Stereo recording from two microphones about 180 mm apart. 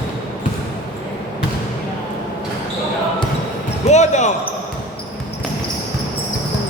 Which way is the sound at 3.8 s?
40° left (ahead or behind).